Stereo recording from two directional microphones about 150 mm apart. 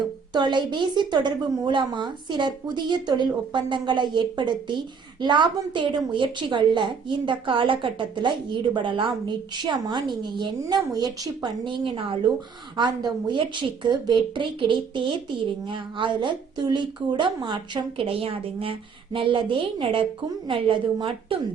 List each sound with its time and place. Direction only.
0.3 s a woman's voice: 30° right (ahead or behind)